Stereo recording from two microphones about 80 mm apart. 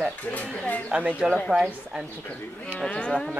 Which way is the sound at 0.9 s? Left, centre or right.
Centre.